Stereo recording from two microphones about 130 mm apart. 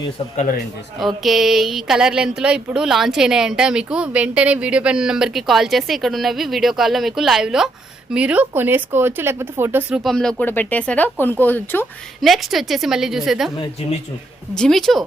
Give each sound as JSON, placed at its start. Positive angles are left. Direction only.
{"t": 0.9, "sound": "speech", "side_deg": 0}
{"t": 9.9, "sound": "speech", "side_deg": 0}
{"t": 10.4, "sound": "speech", "side_deg": 15}
{"t": 12.2, "sound": "speech", "side_deg": 0}
{"t": 14.5, "sound": "speech", "side_deg": 5}